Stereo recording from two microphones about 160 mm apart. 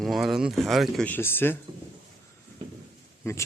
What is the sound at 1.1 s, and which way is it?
Speech, 15° left (ahead or behind).